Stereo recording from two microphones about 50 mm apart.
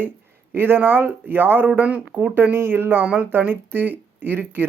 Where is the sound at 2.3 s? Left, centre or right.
Right.